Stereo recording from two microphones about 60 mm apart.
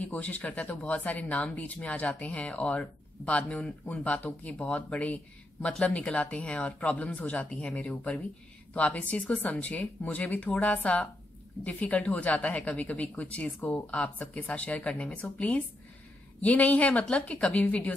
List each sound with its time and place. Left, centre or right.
0.0 s speech: left
7.9 s speech: left
17.6 s speech: left